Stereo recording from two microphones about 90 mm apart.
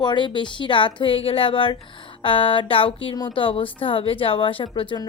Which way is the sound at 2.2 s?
75° left (ahead or behind).